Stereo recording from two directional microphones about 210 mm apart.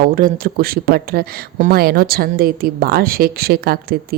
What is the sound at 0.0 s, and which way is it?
A woman's voice, 40° right (ahead or behind).